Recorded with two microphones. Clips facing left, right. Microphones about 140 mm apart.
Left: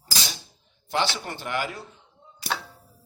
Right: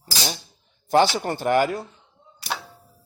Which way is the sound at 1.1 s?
45° right (ahead or behind).